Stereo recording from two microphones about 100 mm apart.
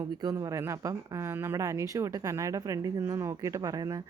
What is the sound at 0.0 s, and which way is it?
Speech, 40° right (ahead or behind).